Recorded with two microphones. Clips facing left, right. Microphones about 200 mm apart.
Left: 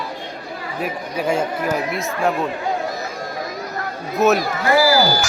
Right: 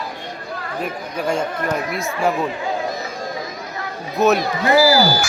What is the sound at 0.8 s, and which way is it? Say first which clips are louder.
Speech: left 2 dB; 5° left (ahead or behind).